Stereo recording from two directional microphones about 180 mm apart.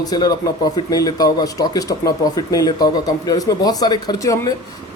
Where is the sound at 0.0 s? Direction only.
20° left (ahead or behind).